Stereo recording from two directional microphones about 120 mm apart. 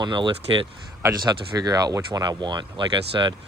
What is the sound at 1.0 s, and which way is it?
Speech, 35° right (ahead or behind).